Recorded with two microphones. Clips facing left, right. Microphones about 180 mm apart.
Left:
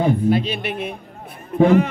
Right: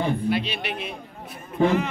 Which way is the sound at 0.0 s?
45° left (ahead or behind).